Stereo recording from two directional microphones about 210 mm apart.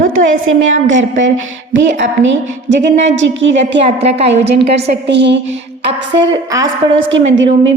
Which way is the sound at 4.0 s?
30° right (ahead or behind).